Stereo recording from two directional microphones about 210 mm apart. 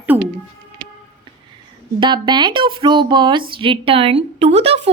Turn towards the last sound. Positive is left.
turn(degrees=-30)  # may be behind; listen again after turning